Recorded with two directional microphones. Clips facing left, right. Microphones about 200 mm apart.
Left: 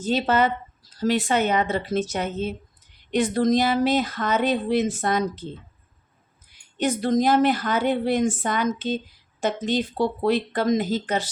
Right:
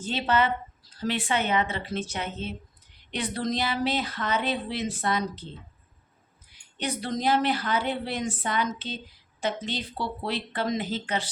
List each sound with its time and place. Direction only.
0.0 s speech: 40° left (ahead or behind)
6.7 s speech: 45° left (ahead or behind)